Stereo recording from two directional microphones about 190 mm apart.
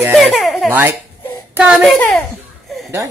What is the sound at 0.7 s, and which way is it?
A child's voice, 10° right (ahead or behind).